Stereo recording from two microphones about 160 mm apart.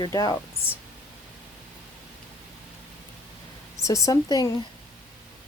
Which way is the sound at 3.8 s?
20° left (ahead or behind).